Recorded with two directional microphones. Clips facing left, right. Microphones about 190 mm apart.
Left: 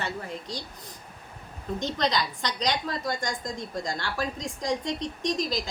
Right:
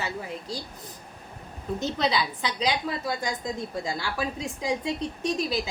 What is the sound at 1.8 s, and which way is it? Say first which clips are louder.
A woman's voice: right 1 dB; 5° right (ahead or behind).